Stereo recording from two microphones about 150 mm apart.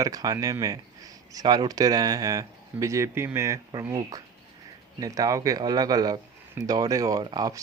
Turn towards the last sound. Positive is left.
turn(degrees=-25)  # may be behind; listen again after turning